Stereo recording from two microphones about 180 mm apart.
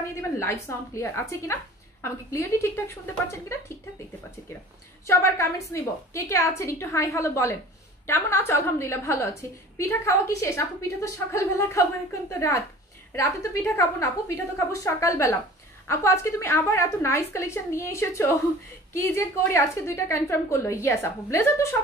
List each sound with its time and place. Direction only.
0.4 s a woman's voice: 15° left (ahead or behind)
5.0 s a woman's voice: 15° left (ahead or behind)